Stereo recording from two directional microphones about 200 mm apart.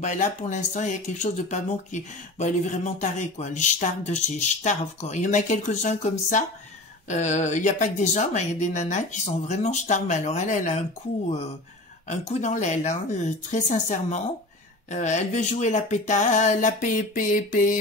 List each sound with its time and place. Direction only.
0.0 s speech: 35° left (ahead or behind)
12.1 s speech: 35° left (ahead or behind)